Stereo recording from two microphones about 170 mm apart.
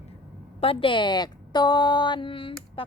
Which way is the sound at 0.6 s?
30° left (ahead or behind).